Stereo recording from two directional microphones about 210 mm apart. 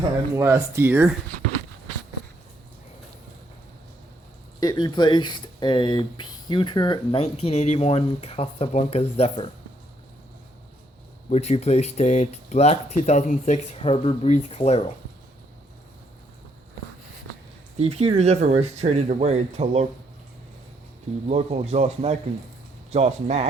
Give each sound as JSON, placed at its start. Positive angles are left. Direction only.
{"t": 0.3, "sound": "speech", "side_deg": -10}
{"t": 4.6, "sound": "speech", "side_deg": 20}
{"t": 11.3, "sound": "speech", "side_deg": 30}
{"t": 17.7, "sound": "speech", "side_deg": -30}
{"t": 21.2, "sound": "speech", "side_deg": -30}